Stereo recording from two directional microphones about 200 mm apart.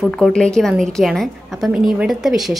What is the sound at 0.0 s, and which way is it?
A woman's voice, 5° left (ahead or behind).